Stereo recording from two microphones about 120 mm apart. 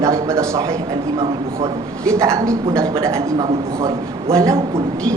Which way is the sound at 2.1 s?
25° right (ahead or behind).